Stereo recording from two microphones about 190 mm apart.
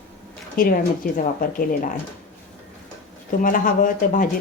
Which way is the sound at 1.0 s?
50° left (ahead or behind).